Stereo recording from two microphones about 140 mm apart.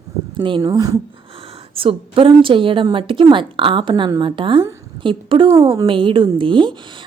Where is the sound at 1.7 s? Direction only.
40° right (ahead or behind).